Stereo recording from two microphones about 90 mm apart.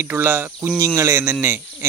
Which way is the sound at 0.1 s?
20° right (ahead or behind).